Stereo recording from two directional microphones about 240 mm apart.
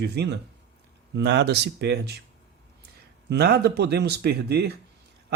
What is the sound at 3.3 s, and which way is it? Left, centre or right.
Speech, right.